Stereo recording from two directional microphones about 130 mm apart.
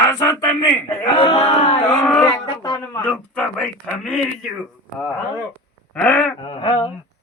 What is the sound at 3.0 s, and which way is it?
Speech, 10° left (ahead or behind).